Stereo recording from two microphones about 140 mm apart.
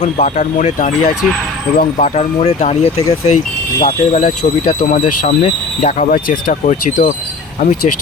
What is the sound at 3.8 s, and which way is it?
Speech, 65° left (ahead or behind).